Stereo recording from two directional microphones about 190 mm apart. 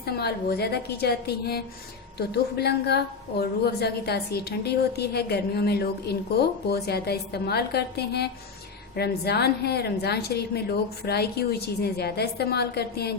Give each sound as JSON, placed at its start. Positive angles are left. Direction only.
{"t": 0.0, "sound": "a woman's voice", "side_deg": 55}